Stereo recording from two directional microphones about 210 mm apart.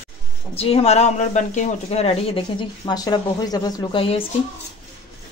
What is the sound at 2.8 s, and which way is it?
Speech, 20° left (ahead or behind).